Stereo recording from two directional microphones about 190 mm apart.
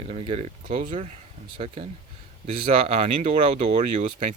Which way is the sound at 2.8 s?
35° right (ahead or behind).